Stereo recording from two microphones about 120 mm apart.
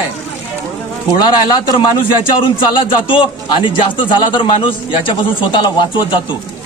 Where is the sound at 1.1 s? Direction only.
40° left (ahead or behind).